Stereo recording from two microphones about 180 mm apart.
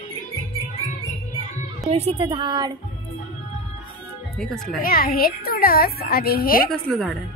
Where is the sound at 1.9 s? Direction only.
35° right (ahead or behind).